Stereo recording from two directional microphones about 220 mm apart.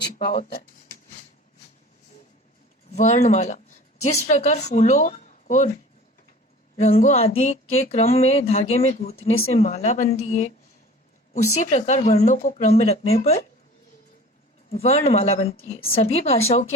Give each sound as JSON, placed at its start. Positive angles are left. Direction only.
{"t": 0.0, "sound": "a sound", "side_deg": 45}
{"t": 2.9, "sound": "speech", "side_deg": 30}
{"t": 6.7, "sound": "speech", "side_deg": 30}
{"t": 11.6, "sound": "speech", "side_deg": 35}
{"t": 14.7, "sound": "speech", "side_deg": 25}